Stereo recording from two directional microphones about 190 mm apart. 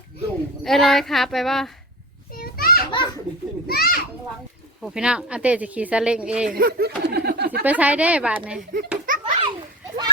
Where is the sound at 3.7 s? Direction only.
50° left (ahead or behind).